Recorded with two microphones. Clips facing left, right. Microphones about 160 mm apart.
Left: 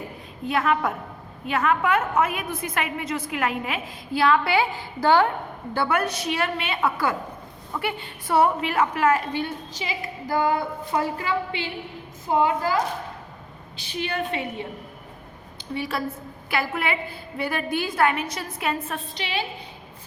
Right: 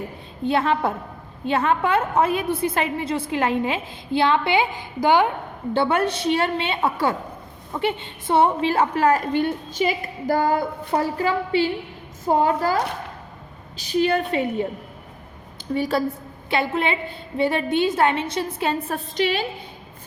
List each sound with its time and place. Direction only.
0.4 s a woman's voice: 30° right (ahead or behind)
15.7 s a woman's voice: 35° right (ahead or behind)
16.5 s a woman's voice: 25° right (ahead or behind); by 19.5 s 45° right (ahead or behind)